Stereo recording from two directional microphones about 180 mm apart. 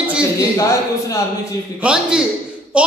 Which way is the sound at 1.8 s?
5° right (ahead or behind).